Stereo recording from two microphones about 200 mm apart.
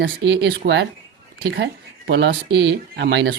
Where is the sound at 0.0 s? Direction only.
60° right (ahead or behind).